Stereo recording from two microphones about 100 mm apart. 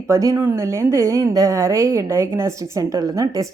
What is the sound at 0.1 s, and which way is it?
A woman's voice, 35° right (ahead or behind).